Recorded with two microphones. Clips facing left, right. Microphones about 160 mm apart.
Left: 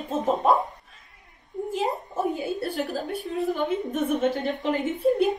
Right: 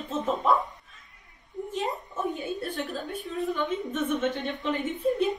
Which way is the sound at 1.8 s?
35° left (ahead or behind).